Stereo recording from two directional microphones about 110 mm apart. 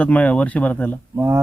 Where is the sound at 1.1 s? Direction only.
25° right (ahead or behind).